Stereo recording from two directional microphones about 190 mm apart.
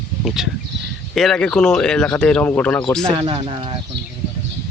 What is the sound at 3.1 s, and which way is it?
Speech, 25° right (ahead or behind).